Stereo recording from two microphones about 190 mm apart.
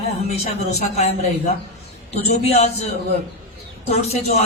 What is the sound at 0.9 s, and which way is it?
A man's voice, 35° left (ahead or behind).